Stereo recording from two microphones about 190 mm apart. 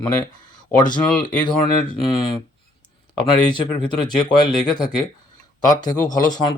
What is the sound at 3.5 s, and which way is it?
Speech, 25° left (ahead or behind).